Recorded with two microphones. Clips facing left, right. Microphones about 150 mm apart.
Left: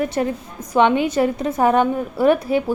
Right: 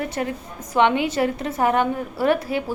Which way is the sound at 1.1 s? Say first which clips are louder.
Left 4 dB; 20° left (ahead or behind).